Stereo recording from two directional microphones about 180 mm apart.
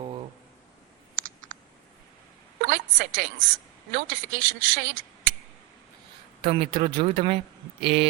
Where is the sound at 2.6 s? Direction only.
55° right (ahead or behind).